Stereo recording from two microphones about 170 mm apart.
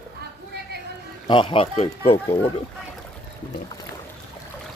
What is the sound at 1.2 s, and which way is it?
Speech, 30° left (ahead or behind).